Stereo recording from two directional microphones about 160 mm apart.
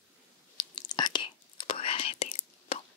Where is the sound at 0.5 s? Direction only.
25° left (ahead or behind).